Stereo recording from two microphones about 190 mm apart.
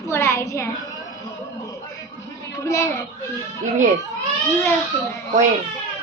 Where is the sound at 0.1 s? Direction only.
15° left (ahead or behind).